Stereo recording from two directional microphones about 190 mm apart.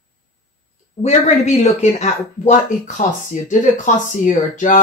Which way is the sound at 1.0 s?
35° left (ahead or behind).